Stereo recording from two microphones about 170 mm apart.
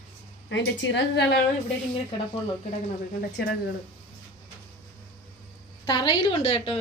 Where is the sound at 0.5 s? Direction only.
90° left.